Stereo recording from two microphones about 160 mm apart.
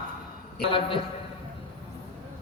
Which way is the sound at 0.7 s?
35° left (ahead or behind).